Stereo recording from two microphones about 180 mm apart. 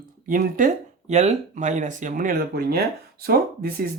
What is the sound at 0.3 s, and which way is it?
Speech, 50° right (ahead or behind).